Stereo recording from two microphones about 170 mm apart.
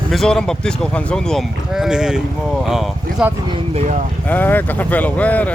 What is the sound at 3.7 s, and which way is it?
Speech, 40° right (ahead or behind).